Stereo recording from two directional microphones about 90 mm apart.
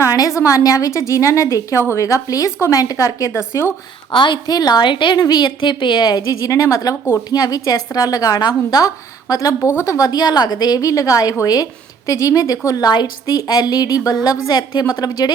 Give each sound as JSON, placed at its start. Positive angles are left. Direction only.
{"t": 0.0, "sound": "a woman's voice", "side_deg": 35}
{"t": 4.1, "sound": "a woman's voice", "side_deg": 60}
{"t": 5.5, "sound": "a woman's voice", "side_deg": 60}
{"t": 9.3, "sound": "a woman's voice", "side_deg": 40}